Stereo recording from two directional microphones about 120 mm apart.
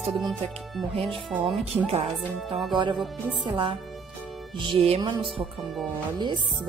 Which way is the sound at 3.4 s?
45° right (ahead or behind).